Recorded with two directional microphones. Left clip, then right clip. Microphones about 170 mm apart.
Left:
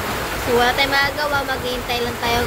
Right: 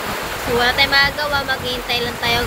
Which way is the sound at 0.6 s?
15° left (ahead or behind).